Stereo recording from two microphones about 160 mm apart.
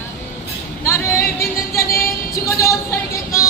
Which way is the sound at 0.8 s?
20° left (ahead or behind).